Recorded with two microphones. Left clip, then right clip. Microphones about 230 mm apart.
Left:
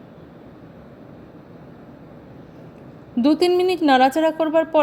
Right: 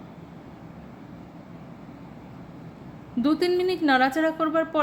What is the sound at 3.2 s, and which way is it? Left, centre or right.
A woman's voice, left.